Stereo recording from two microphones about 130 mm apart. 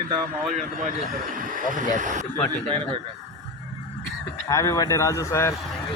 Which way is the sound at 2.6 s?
40° right (ahead or behind).